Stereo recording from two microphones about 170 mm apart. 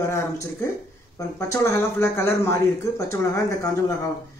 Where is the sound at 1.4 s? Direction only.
15° left (ahead or behind).